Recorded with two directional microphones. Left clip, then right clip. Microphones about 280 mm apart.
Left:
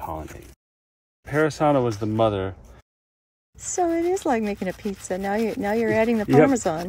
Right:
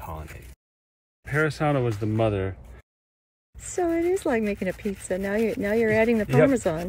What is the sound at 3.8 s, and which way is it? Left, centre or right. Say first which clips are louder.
Speech: left 2 dB; centre.